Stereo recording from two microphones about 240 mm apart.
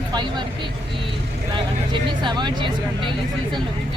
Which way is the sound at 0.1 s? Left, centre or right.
Centre.